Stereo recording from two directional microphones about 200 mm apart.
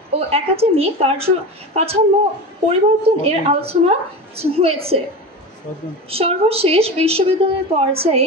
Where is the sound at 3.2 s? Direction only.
30° right (ahead or behind).